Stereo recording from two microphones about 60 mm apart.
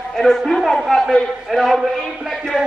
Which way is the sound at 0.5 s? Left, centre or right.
Centre.